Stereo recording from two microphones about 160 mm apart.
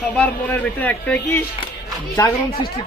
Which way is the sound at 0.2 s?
10° left (ahead or behind).